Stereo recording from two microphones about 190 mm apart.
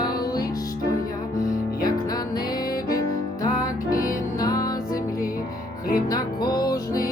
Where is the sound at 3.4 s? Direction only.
20° left (ahead or behind).